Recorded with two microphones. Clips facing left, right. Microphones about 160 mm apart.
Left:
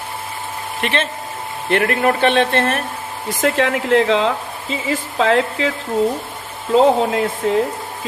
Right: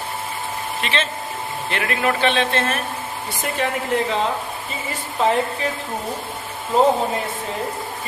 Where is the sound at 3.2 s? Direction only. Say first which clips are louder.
Left 8 dB; 90° left.